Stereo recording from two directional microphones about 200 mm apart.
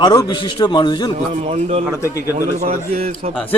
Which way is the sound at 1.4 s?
35° right (ahead or behind).